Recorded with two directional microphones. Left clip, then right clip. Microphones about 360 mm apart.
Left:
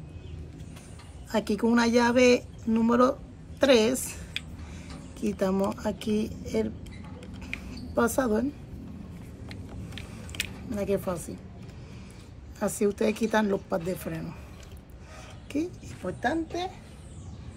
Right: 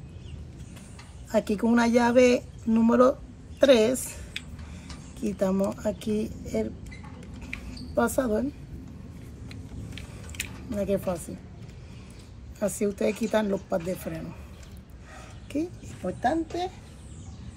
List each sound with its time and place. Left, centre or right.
1.3 s a woman's voice: centre
7.5 s a sound: centre
10.8 s speech: centre
12.5 s speech: centre
15.5 s speech: centre